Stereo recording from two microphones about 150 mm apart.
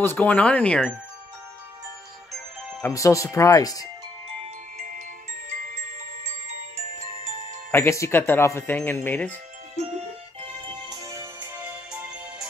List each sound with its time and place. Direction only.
0.0 s speech: 10° left (ahead or behind)
2.8 s speech: 20° left (ahead or behind)
4.7 s glockenspiel: 65° right (ahead or behind)
5.5 s music: 55° right (ahead or behind)
7.7 s speech: 20° left (ahead or behind)
10.9 s music: 25° right (ahead or behind)
11.5 s music: 10° right (ahead or behind)